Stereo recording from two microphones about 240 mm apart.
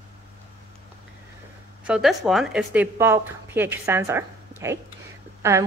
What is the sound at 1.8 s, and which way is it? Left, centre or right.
A woman's voice, centre.